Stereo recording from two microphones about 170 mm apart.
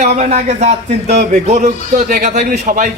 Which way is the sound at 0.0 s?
40° right (ahead or behind).